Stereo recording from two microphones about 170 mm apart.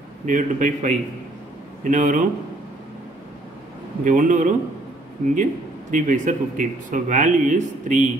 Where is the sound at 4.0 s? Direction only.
50° right (ahead or behind).